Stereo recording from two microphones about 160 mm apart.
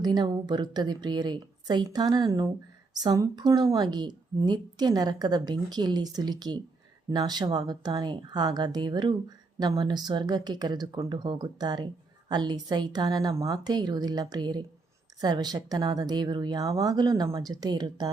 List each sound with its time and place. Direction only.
0.0 s a woman's voice: 25° right (ahead or behind)